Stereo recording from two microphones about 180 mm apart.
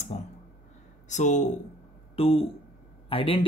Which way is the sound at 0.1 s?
45° left (ahead or behind).